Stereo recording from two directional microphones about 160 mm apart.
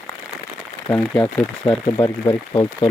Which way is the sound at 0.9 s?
10° left (ahead or behind).